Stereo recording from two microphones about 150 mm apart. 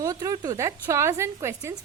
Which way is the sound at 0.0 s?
20° right (ahead or behind).